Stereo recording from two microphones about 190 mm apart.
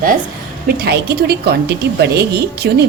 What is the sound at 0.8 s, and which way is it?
A woman's voice, 60° right (ahead or behind).